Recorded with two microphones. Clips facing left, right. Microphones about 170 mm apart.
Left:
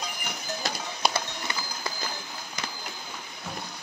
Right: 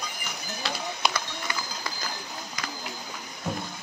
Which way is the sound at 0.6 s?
45° left (ahead or behind).